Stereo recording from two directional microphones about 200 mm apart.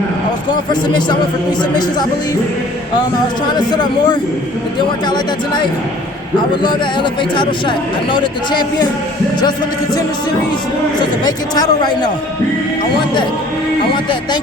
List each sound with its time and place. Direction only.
0.7 s speech: 20° left (ahead or behind)
3.7 s speech: 20° left (ahead or behind)
6.6 s speech: 25° left (ahead or behind)
11.2 s speech: 20° left (ahead or behind)